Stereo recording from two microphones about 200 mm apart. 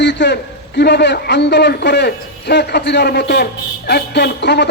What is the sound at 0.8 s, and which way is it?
A man's voice, 55° left (ahead or behind).